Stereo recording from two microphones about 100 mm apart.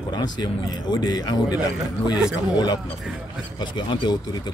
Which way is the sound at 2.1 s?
10° right (ahead or behind).